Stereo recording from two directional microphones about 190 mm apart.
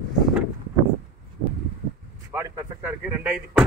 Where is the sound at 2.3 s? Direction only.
10° right (ahead or behind).